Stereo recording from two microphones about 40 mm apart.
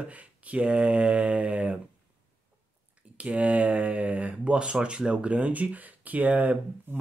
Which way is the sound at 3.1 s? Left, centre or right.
Right.